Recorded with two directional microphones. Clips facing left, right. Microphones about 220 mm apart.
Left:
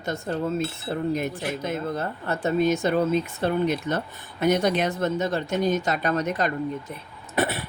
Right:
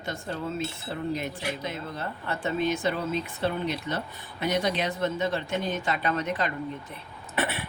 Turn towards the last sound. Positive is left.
turn(degrees=40)  # may be behind; listen again after turning